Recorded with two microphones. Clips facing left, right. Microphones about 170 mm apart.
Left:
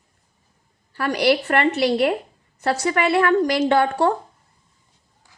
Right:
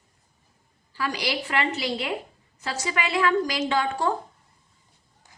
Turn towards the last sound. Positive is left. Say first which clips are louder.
# left 7 dB
turn(degrees=60)  # may be behind; listen again after turning